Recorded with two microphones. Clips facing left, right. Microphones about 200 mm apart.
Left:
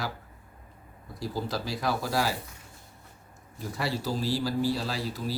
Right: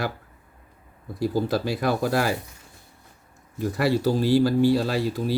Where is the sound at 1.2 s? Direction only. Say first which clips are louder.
Right 9 dB; 60° right (ahead or behind).